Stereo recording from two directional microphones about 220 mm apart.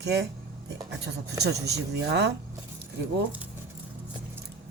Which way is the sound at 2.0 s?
50° right (ahead or behind).